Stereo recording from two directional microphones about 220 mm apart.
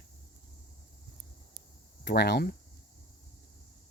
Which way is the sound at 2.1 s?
50° left (ahead or behind).